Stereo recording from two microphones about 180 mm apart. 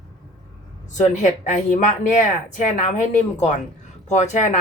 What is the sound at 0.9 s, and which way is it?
A woman's voice, 40° left (ahead or behind).